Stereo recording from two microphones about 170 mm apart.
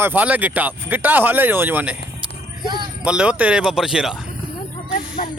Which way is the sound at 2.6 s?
25° right (ahead or behind).